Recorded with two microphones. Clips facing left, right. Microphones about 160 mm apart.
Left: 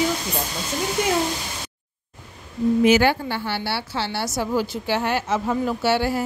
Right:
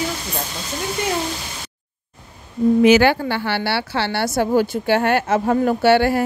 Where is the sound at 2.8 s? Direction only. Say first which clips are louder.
Right 4 dB; 80° right.